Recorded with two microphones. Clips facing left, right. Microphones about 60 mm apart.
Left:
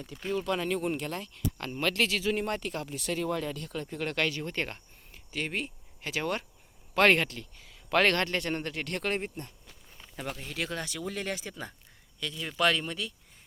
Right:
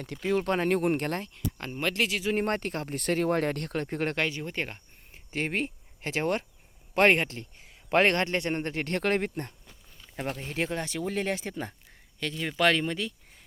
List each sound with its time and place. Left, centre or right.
0.0 s speech: right
0.4 s speech: right
1.7 s speech: centre
2.3 s speech: right
4.1 s speech: right
5.1 s a sound: right
6.9 s speech: right